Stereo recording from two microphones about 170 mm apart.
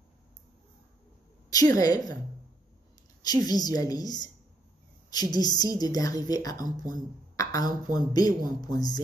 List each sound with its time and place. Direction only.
1.5 s speech: 20° left (ahead or behind)
3.2 s speech: 25° left (ahead or behind)